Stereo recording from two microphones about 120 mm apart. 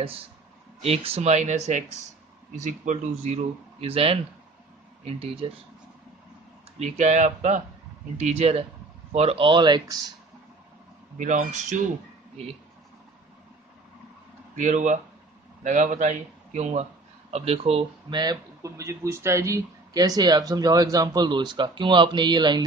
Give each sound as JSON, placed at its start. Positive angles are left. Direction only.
{"t": 0.8, "sound": "speech", "side_deg": -55}
{"t": 6.8, "sound": "speech", "side_deg": -75}
{"t": 8.2, "sound": "speech", "side_deg": -60}
{"t": 11.1, "sound": "speech", "side_deg": -90}
{"t": 14.5, "sound": "speech", "side_deg": -90}
{"t": 17.3, "sound": "speech", "side_deg": -55}
{"t": 18.1, "sound": "speech", "side_deg": -35}